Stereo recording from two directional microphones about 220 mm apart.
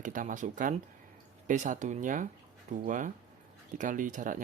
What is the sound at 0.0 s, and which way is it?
Speech, 35° right (ahead or behind).